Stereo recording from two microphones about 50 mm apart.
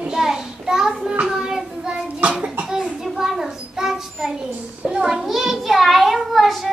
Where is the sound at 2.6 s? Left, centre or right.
Centre.